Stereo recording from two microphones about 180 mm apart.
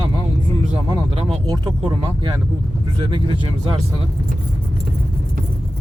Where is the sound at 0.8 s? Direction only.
25° right (ahead or behind).